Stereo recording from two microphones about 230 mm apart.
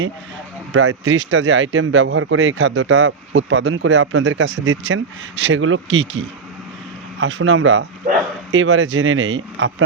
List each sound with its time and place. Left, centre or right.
0.7 s speech: right